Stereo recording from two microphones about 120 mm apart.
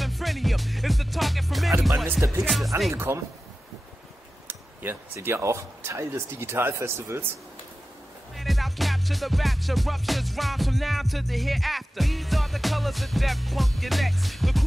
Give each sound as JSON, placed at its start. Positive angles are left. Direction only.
{"t": 0.0, "sound": "music", "side_deg": 0}
{"t": 2.9, "sound": "speech", "side_deg": -20}
{"t": 4.5, "sound": "speech", "side_deg": -20}
{"t": 8.4, "sound": "music", "side_deg": 0}